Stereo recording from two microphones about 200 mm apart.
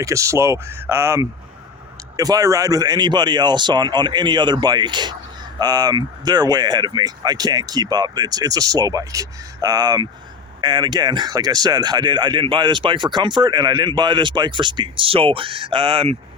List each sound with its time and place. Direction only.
0.0 s speech: 15° right (ahead or behind)